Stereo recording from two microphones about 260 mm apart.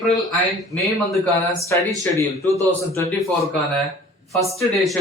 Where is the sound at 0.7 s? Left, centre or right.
Centre.